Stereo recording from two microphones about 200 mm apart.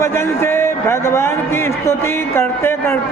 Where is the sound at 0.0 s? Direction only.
10° left (ahead or behind).